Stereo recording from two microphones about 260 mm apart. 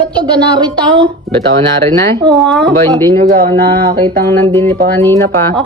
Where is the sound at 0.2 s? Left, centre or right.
Centre.